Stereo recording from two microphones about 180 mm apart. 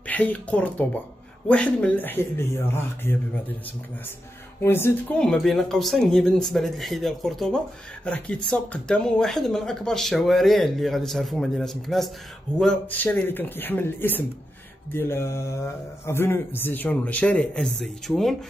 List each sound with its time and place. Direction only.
0.0 s speech: 10° left (ahead or behind)
4.6 s speech: 10° left (ahead or behind)